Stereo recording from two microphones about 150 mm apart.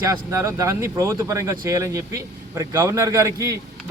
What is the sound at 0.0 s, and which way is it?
Speech, 20° right (ahead or behind).